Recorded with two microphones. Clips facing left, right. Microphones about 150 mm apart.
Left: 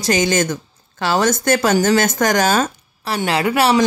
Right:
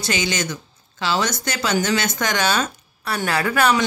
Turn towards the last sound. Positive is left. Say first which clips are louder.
# left 3 dB
turn(degrees=25)  # may be behind; listen again after turning